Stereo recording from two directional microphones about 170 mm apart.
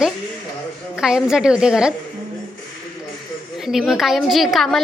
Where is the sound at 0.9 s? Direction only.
5° right (ahead or behind).